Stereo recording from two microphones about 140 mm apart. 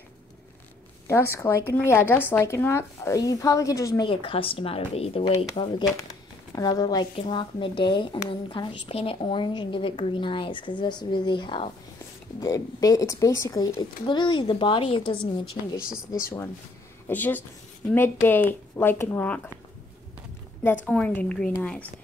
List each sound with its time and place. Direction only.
1.0 s speech: 20° left (ahead or behind)
4.0 s a woman's voice: 40° left (ahead or behind)
12.4 s a woman's voice: 25° left (ahead or behind)
17.1 s speech: 15° left (ahead or behind)
20.6 s speech: 10° left (ahead or behind)